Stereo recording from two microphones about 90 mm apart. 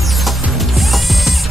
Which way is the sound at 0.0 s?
Centre (ahead or behind).